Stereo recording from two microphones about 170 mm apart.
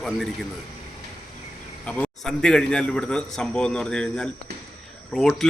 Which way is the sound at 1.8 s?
5° left (ahead or behind).